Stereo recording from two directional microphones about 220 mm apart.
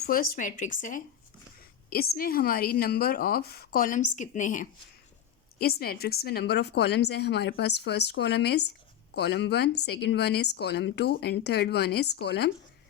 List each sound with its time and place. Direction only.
0.0 s speech: 40° left (ahead or behind)
5.8 s speech: 45° left (ahead or behind)